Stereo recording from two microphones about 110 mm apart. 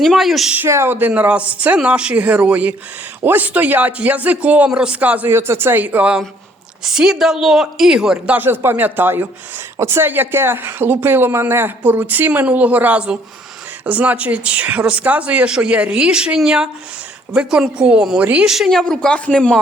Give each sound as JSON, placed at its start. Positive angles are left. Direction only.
{"t": 0.0, "sound": "speech", "side_deg": 0}
{"t": 0.5, "sound": "a woman's voice", "side_deg": -20}
{"t": 8.4, "sound": "a man's voice", "side_deg": -20}